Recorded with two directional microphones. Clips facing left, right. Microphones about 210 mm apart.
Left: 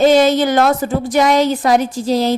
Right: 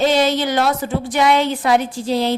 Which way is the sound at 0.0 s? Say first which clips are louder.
Left 5 dB; 45° left (ahead or behind).